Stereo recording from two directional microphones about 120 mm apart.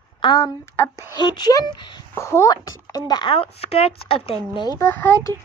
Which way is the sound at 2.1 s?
20° left (ahead or behind).